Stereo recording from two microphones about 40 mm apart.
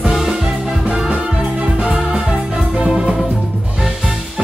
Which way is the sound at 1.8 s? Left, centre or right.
Right.